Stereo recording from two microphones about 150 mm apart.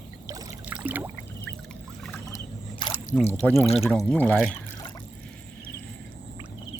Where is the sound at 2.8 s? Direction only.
30° left (ahead or behind).